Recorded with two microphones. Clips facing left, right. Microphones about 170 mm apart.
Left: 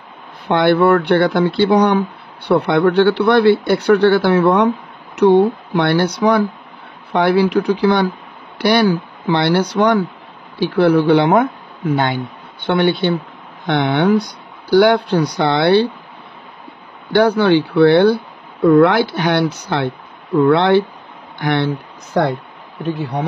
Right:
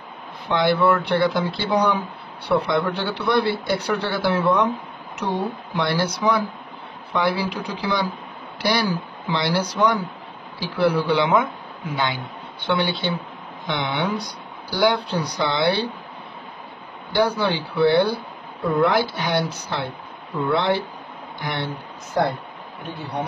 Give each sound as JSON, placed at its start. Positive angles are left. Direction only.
{"t": 0.5, "sound": "speech", "side_deg": 55}
{"t": 17.1, "sound": "speech", "side_deg": 65}